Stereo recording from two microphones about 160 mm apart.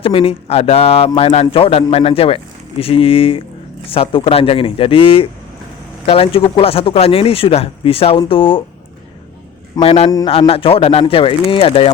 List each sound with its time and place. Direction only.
0.0 s speech: 35° left (ahead or behind)
9.8 s speech: 40° left (ahead or behind)